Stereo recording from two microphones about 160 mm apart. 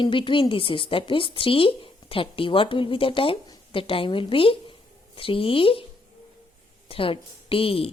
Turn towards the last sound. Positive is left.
turn(degrees=35)  # may be behind; listen again after turning